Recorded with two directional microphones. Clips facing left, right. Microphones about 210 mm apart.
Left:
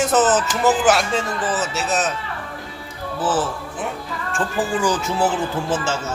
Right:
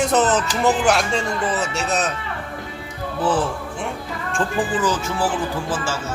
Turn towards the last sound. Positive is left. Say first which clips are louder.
# left 2 dB
turn(degrees=20)  # may be behind; listen again after turning